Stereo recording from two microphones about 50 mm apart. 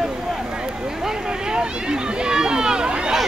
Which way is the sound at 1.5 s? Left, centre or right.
Centre.